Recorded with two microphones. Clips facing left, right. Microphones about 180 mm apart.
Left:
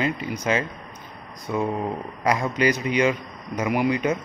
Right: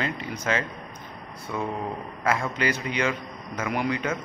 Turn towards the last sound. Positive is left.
turn(degrees=15)  # may be behind; listen again after turning